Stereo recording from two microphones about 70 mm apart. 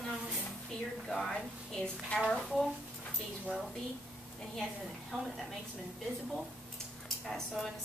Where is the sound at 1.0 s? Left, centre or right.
Centre.